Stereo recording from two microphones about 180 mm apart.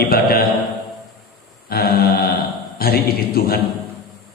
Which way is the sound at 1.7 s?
60° left (ahead or behind).